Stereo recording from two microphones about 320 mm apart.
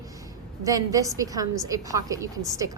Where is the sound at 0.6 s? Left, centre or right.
Centre.